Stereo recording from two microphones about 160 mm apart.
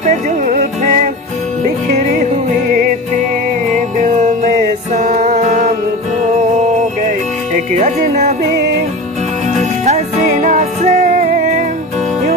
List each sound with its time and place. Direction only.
0.0 s music: 50° right (ahead or behind)
3.7 s music: 50° right (ahead or behind)
7.5 s speech: 50° right (ahead or behind)
9.8 s music: 45° right (ahead or behind)